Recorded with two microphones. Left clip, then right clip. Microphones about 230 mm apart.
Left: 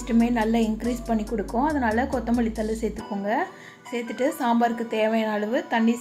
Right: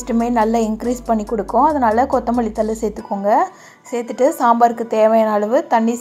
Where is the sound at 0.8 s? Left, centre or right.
Centre.